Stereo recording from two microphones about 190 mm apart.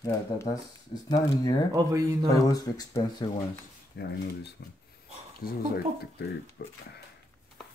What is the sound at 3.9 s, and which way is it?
Speech, 60° left (ahead or behind).